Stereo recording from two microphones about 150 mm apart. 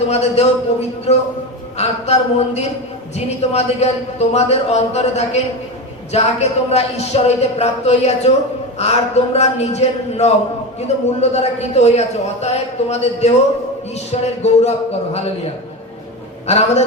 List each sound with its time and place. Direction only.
0.1 s a man's voice: 45° left (ahead or behind)
16.5 s a man's voice: 45° left (ahead or behind)